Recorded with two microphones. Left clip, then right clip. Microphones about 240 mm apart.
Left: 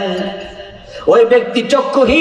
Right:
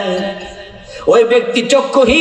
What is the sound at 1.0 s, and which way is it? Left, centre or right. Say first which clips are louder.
A man's voice: even; right.